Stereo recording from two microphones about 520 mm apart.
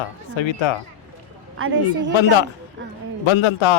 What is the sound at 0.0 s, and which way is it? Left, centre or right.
Speech, left.